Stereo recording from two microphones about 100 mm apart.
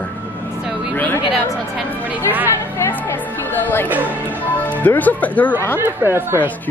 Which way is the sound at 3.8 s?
15° right (ahead or behind).